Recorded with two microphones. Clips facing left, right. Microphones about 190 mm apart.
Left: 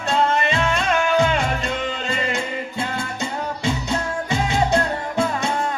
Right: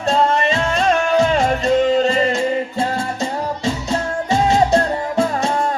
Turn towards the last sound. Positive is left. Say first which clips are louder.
# right 4 dB
turn(degrees=-40)  # may be behind; listen again after turning